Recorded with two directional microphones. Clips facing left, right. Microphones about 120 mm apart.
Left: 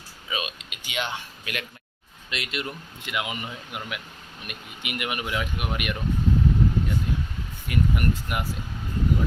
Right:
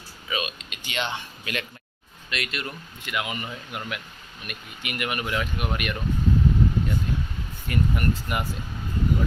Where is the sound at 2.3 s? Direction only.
20° left (ahead or behind).